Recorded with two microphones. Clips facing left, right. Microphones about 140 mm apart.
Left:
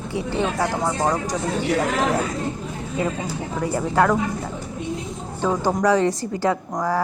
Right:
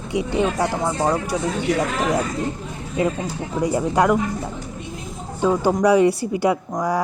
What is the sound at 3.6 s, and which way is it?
Speech, 15° right (ahead or behind).